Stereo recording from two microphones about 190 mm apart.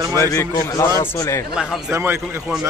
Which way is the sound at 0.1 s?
15° left (ahead or behind).